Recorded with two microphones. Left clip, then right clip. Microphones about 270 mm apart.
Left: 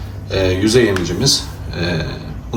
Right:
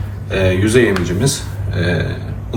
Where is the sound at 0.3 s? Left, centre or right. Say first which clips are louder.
Even; centre.